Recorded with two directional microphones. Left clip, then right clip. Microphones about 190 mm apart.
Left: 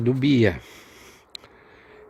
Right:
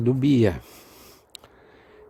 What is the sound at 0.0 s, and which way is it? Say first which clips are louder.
Speech: left 1 dB; 15° right (ahead or behind).